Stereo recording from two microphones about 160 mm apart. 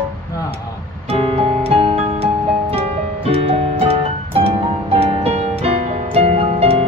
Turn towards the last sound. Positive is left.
turn(degrees=-35)  # may be behind; listen again after turning